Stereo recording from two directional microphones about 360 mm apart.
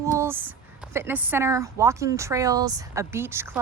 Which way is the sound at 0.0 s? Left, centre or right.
Centre.